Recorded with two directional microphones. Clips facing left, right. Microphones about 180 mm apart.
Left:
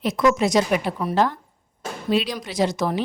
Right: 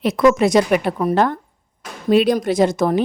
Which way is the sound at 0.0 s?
60° right (ahead or behind).